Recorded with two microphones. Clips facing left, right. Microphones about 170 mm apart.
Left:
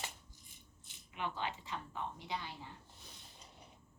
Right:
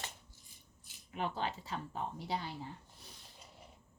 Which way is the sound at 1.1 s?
40° right (ahead or behind).